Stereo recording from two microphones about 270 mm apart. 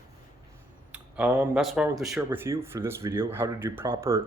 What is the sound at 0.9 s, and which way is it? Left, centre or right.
Speech, centre.